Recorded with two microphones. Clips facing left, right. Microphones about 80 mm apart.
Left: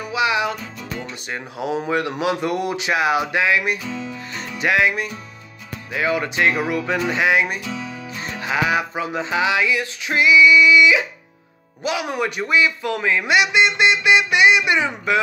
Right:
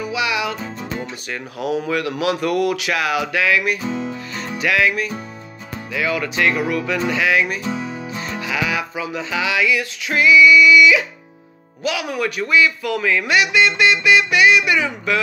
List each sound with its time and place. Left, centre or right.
0.1 s music: left
0.6 s music: right
1.3 s speech: left
3.8 s music: right
4.6 s music: left
5.9 s speech: left
7.1 s music: left
7.6 s music: right
8.4 s speech: left